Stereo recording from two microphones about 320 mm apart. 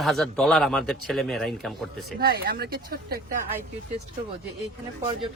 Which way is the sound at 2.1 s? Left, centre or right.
Right.